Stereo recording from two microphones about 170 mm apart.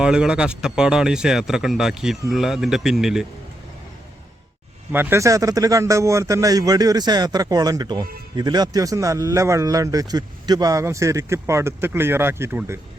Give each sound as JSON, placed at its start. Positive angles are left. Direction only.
{"t": 0.0, "sound": "speech", "side_deg": -5}
{"t": 4.9, "sound": "speech", "side_deg": -10}